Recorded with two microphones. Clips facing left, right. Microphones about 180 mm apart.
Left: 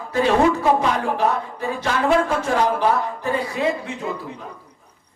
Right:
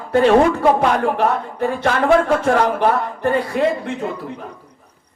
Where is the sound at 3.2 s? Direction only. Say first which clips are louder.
Right 7 dB; 60° right (ahead or behind).